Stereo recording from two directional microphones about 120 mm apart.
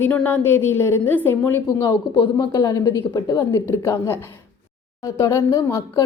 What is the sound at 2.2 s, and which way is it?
A woman's voice, 40° left (ahead or behind).